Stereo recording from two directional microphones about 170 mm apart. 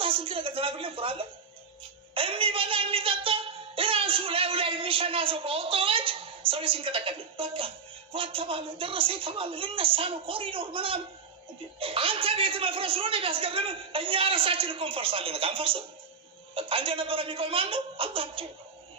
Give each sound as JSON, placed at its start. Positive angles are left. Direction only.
{"t": 0.0, "sound": "speech", "side_deg": -30}